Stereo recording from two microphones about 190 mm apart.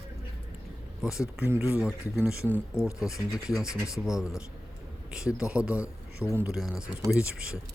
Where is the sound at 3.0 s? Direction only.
15° left (ahead or behind).